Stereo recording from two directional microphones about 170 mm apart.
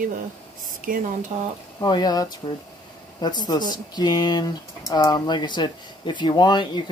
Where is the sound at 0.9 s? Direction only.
55° right (ahead or behind).